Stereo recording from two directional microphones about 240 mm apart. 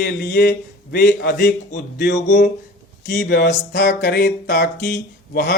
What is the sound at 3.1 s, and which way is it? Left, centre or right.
Mantra, left.